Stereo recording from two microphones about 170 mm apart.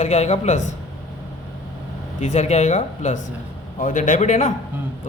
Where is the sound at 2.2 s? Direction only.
40° left (ahead or behind).